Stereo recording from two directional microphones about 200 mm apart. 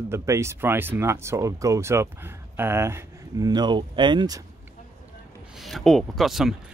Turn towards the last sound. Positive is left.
turn(degrees=0)  # may be behind; listen again after turning